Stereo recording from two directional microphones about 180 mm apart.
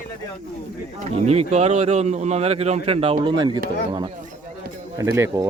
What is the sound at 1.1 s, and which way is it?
Speech, 35° right (ahead or behind).